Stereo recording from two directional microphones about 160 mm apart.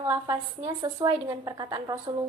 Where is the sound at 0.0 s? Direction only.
20° right (ahead or behind).